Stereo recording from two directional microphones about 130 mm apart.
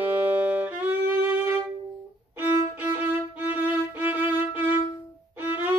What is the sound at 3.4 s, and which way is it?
Music, 15° right (ahead or behind).